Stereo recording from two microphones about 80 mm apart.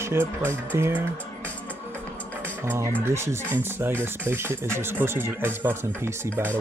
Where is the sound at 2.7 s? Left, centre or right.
Right.